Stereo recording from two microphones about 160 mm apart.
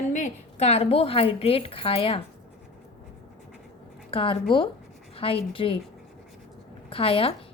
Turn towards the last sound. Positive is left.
turn(degrees=35)  # may be behind; listen again after turning